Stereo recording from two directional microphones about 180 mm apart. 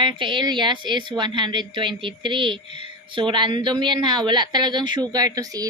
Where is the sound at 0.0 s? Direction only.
30° right (ahead or behind).